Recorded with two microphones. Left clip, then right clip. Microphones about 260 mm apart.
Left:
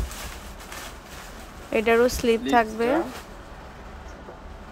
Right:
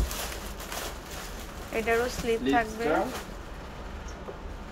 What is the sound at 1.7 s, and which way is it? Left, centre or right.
Speech, left.